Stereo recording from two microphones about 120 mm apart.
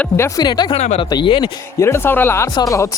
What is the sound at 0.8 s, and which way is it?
Speech, 65° left (ahead or behind).